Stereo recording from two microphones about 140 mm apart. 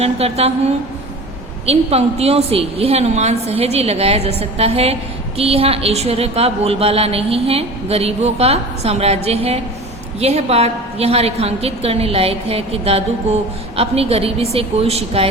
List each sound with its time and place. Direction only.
0.0 s a woman's voice: 45° right (ahead or behind)
1.6 s a woman's voice: 45° right (ahead or behind)